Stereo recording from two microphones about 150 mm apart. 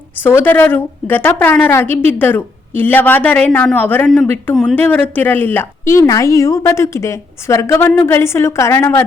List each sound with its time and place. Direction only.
0.2 s a woman's voice: 15° left (ahead or behind)